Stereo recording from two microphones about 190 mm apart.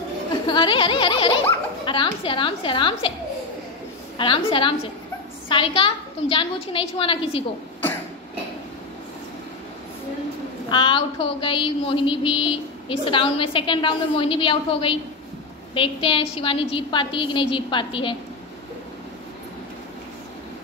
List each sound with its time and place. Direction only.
0.5 s a woman's voice: 25° left (ahead or behind)
4.2 s a woman's voice: 25° left (ahead or behind)
10.7 s a woman's voice: 25° left (ahead or behind)